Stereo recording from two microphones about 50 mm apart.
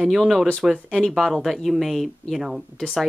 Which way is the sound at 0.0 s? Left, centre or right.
Centre.